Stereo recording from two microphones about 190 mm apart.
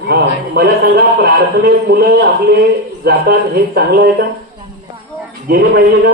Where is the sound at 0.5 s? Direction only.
55° right (ahead or behind).